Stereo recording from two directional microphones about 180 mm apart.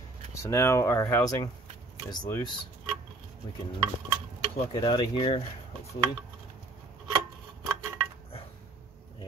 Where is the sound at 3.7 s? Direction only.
30° right (ahead or behind).